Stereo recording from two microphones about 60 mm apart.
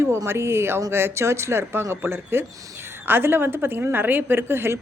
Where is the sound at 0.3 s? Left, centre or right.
Right.